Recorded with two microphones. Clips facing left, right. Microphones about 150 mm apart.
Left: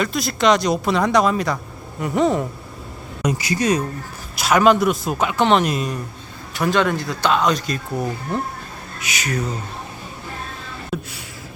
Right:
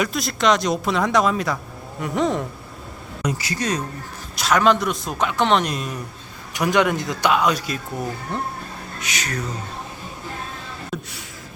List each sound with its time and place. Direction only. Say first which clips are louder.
0.0 s speech: left 2 dB; centre (ahead or behind)
3.2 s speech: left 5 dB; 15° left (ahead or behind)
6.5 s speech: even; 15° right (ahead or behind)
8.3 s speech: left 2 dB; 5° left (ahead or behind)
10.9 s gasp: left 4 dB; 5° left (ahead or behind)